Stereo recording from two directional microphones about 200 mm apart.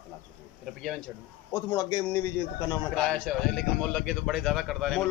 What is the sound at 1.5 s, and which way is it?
Speech, 20° left (ahead or behind).